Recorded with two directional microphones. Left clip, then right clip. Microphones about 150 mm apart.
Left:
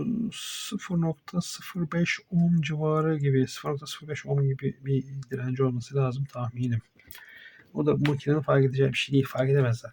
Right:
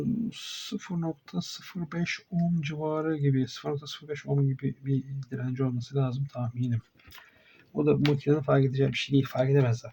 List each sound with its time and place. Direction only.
0.3 s owl: 55° left (ahead or behind)
2.6 s speech: 50° left (ahead or behind); by 9.9 s 35° left (ahead or behind)